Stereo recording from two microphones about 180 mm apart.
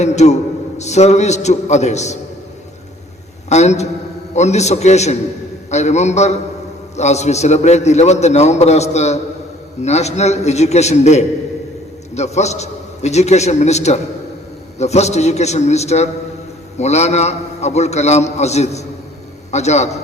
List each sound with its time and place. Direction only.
0.0 s a man's voice: 40° left (ahead or behind)
3.5 s a man's voice: 40° left (ahead or behind)